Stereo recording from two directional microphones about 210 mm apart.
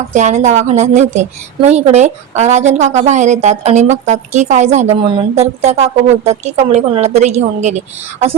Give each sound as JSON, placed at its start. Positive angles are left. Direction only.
{"t": 0.1, "sound": "a woman's voice", "side_deg": -35}